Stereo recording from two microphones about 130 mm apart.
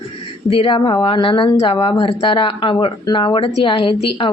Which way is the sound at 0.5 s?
40° left (ahead or behind).